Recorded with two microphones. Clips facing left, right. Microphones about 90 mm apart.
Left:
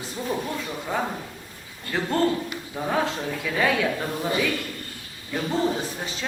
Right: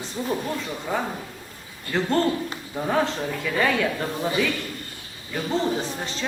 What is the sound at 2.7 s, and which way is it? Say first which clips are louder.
A man's voice: right 2 dB; centre (ahead or behind).